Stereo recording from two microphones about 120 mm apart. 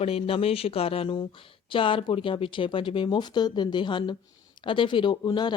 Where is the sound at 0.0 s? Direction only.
55° left (ahead or behind).